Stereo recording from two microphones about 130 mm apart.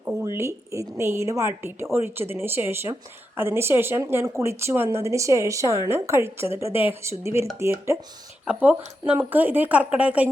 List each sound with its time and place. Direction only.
0.2 s a woman's voice: 20° right (ahead or behind)